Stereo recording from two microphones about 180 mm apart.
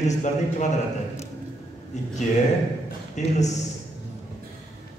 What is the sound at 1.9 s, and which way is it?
A man's voice, 40° left (ahead or behind).